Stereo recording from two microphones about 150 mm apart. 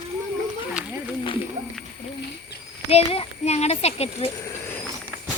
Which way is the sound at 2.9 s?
40° left (ahead or behind).